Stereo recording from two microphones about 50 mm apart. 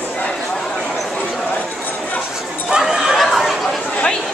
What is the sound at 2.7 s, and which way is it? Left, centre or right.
Chatter, centre.